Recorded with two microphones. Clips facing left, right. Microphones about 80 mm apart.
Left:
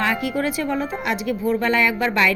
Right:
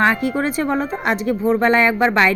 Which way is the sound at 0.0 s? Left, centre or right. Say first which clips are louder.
Right 4 dB; right.